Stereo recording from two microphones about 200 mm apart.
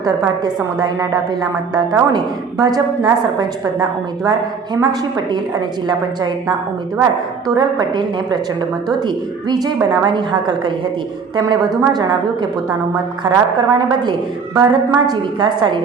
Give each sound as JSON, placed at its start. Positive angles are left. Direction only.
{"t": 0.0, "sound": "a woman's voice", "side_deg": -20}
{"t": 7.4, "sound": "a woman's voice", "side_deg": -20}